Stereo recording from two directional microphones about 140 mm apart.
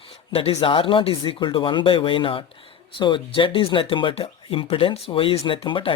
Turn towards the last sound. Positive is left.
turn(degrees=40)  # may be behind; listen again after turning